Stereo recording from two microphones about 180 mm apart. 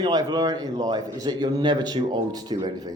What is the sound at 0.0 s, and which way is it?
A man's voice, 20° right (ahead or behind).